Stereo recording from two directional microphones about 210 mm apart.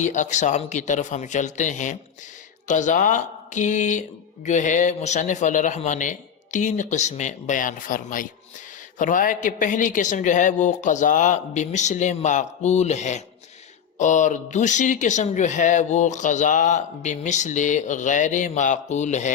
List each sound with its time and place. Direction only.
0.0 s speech: 35° left (ahead or behind)